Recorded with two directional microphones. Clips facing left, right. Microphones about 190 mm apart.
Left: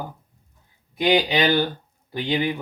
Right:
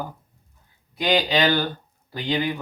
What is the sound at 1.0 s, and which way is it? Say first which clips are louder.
Speech: left 2 dB; 15° left (ahead or behind).